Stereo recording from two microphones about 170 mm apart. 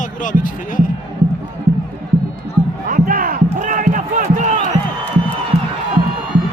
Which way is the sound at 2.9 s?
55° right (ahead or behind).